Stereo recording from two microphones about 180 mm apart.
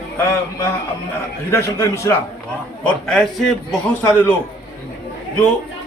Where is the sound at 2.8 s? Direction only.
5° left (ahead or behind).